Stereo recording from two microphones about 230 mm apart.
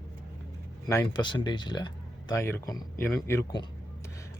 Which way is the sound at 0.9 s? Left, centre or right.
Centre.